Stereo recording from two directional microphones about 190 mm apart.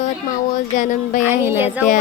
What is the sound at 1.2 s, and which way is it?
Speech, 10° right (ahead or behind).